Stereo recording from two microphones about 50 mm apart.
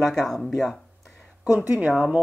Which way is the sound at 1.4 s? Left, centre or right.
Right.